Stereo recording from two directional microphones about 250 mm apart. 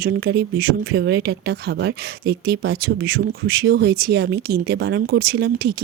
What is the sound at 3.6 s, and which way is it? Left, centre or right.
Speech, right.